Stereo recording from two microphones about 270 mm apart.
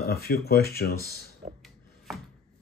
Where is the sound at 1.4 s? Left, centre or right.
Right.